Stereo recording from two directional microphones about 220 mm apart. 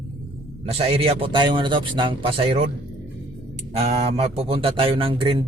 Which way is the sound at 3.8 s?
30° right (ahead or behind).